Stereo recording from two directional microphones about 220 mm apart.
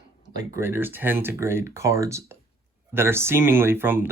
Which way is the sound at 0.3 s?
10° right (ahead or behind).